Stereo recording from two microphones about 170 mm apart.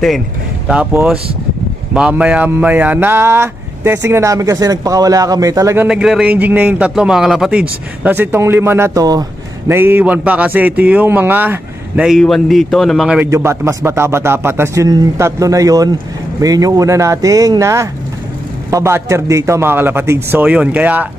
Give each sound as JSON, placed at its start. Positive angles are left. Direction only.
{"t": 0.7, "sound": "a man's voice", "side_deg": -5}
{"t": 5.9, "sound": "a man's voice", "side_deg": -5}
{"t": 13.3, "sound": "a man's voice", "side_deg": -15}